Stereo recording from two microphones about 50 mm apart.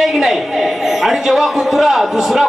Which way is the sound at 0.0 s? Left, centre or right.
Centre.